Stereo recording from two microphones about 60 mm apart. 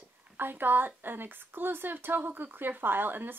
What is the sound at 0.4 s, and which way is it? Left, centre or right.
Speech, right.